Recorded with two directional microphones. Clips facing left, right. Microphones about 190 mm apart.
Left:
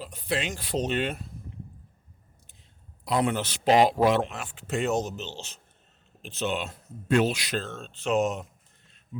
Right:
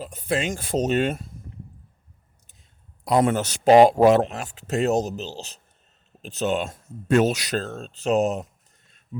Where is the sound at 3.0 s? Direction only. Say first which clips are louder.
Right 6 dB; 45° right (ahead or behind).